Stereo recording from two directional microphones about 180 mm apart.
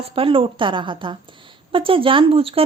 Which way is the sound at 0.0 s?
30° right (ahead or behind).